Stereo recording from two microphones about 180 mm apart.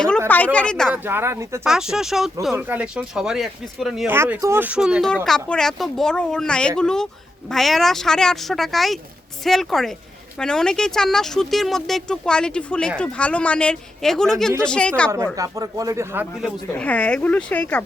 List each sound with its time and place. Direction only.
0.3 s speech: 10° left (ahead or behind)
0.9 s speech: 10° right (ahead or behind)
1.6 s speech: 5° right (ahead or behind)
4.1 s speech: 15° right (ahead or behind); by 15.1 s 5° left (ahead or behind)
15.1 s speech: 15° right (ahead or behind)
16.4 s speech: 10° left (ahead or behind)